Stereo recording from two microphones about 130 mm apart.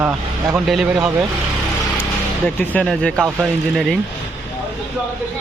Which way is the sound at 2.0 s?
15° left (ahead or behind).